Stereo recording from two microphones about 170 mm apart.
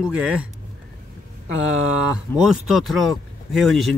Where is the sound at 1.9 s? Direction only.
5° right (ahead or behind).